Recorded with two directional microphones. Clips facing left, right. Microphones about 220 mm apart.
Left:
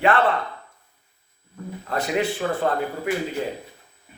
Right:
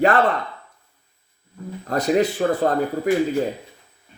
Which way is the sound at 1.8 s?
40° right (ahead or behind).